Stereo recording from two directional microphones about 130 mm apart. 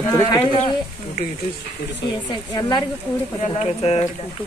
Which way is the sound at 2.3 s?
35° left (ahead or behind).